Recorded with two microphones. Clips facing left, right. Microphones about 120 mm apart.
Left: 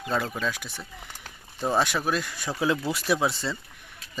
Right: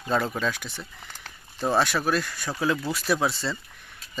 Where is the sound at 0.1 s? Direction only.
Centre (ahead or behind).